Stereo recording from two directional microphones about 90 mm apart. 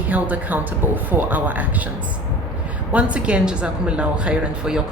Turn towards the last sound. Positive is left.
turn(degrees=-10)  # may be behind; listen again after turning